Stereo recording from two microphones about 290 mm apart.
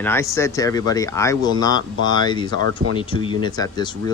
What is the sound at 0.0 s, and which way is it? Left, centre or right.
Speech, centre.